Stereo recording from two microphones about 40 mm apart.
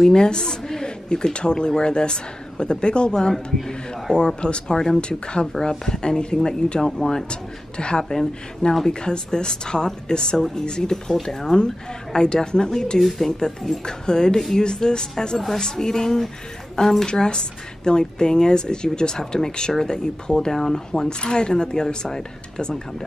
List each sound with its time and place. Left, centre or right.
0.0 s speech: centre
7.2 s speech: left
8.0 s speech: centre